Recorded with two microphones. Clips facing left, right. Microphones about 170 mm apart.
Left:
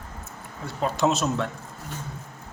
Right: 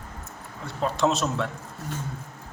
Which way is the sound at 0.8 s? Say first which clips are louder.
Even; centre (ahead or behind).